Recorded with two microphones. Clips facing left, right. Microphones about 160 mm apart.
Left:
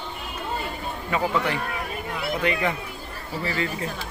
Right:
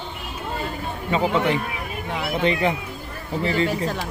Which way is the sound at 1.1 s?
25° right (ahead or behind).